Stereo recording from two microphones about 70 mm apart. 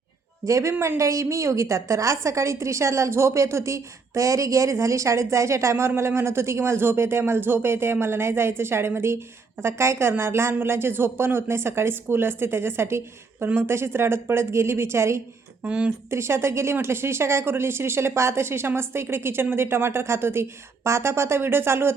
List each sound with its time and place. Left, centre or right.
0.4 s a woman's voice: right
15.6 s speech: centre
16.0 s a woman's voice: right